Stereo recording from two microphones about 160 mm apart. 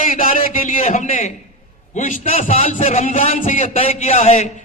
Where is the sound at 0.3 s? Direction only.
60° left (ahead or behind).